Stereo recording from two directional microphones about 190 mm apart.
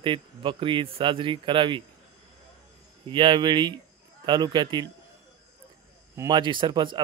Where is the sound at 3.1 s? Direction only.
25° right (ahead or behind).